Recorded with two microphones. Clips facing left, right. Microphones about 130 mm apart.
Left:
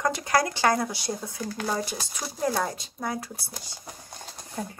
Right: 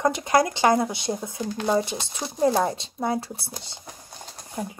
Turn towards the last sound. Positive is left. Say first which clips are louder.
# right 2 dB
turn(degrees=-10)  # may be behind; listen again after turning